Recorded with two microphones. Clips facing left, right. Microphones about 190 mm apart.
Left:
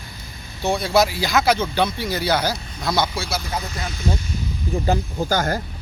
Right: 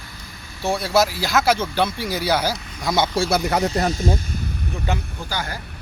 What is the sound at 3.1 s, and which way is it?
Speech, 45° right (ahead or behind).